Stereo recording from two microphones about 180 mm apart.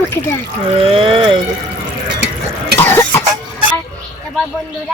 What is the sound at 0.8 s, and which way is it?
Speech, 30° right (ahead or behind).